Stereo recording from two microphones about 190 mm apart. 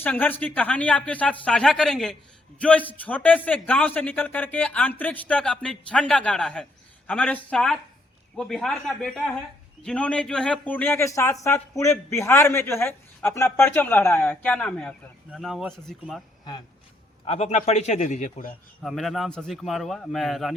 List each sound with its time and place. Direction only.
0.0 s a man's voice: 10° left (ahead or behind)
17.2 s a man's voice: 35° left (ahead or behind)
18.8 s a man's voice: centre (ahead or behind)